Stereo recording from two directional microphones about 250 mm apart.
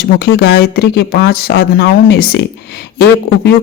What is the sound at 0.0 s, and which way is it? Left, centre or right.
Speech, left.